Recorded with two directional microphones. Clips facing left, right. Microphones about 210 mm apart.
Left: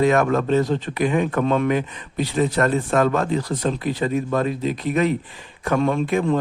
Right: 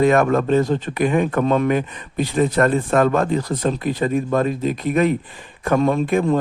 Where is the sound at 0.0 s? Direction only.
50° right (ahead or behind).